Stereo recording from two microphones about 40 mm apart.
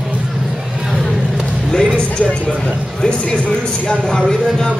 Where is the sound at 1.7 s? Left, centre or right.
Centre.